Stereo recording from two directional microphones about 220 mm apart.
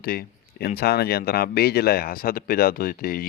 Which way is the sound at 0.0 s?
45° left (ahead or behind).